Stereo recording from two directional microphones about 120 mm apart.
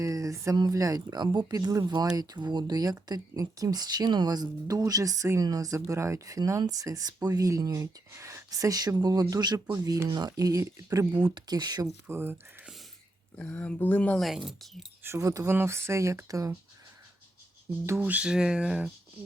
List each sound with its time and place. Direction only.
0.0 s a sound: 25° right (ahead or behind)
0.5 s speech: 30° right (ahead or behind)
11.1 s speech: 40° right (ahead or behind)
12.0 s speech: 20° right (ahead or behind)
13.3 s speech: 10° left (ahead or behind)
14.2 s speech: centre (ahead or behind)
15.0 s speech: 25° right (ahead or behind)
17.7 s speech: 20° right (ahead or behind)